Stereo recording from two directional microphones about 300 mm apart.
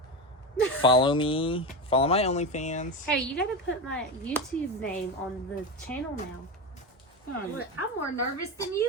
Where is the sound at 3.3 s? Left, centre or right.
Left.